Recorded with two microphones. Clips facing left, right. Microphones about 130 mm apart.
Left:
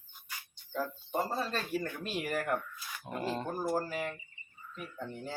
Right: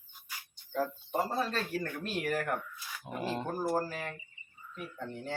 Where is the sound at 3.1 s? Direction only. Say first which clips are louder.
Even; 10° right (ahead or behind).